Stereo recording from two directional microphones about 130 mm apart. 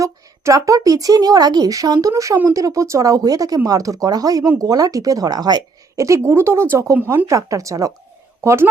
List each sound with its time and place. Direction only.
0.0 s a woman's voice: 25° right (ahead or behind)